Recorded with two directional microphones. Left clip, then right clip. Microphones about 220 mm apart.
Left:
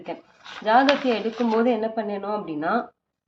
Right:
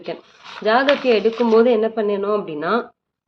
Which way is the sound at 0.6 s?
35° right (ahead or behind).